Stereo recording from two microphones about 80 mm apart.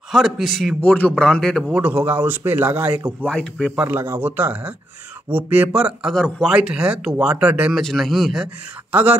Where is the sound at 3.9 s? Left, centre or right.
Right.